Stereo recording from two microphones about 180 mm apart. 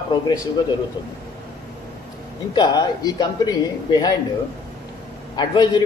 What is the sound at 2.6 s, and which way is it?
A man's voice, 25° left (ahead or behind).